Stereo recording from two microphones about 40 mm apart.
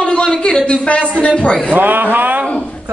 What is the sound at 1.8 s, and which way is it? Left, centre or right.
Speech, right.